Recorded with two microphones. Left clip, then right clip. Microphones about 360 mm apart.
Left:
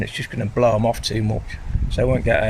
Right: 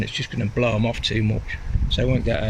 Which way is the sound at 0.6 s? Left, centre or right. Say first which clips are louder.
Left 5 dB; left.